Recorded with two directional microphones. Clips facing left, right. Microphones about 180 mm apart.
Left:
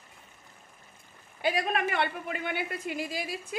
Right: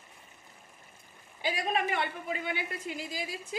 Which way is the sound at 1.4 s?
60° left (ahead or behind).